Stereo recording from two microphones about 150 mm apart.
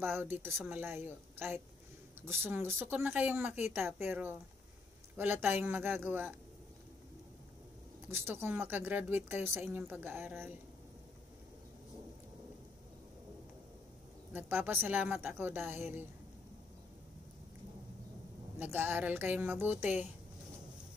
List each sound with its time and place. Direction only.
0.2 s a woman's voice: 15° right (ahead or behind)
2.6 s a woman's voice: 15° right (ahead or behind)
8.1 s a woman's voice: 15° right (ahead or behind)
14.3 s a woman's voice: 15° right (ahead or behind)
18.6 s a woman's voice: 15° right (ahead or behind)